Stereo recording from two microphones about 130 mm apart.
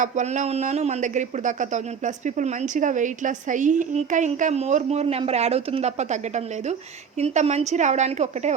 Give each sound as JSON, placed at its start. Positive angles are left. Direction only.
{"t": 0.0, "sound": "a man's voice", "side_deg": -70}